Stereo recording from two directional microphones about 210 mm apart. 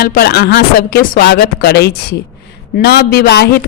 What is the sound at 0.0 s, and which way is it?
A man's voice, 45° left (ahead or behind).